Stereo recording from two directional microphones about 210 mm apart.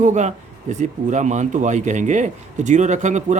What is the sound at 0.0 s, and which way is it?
A man's voice, 35° right (ahead or behind).